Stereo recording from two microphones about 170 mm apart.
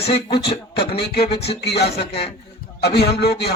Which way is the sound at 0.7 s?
75° left (ahead or behind).